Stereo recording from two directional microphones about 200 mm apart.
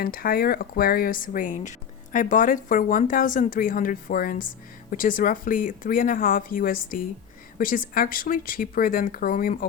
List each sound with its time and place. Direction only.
0.0 s speech: 45° left (ahead or behind)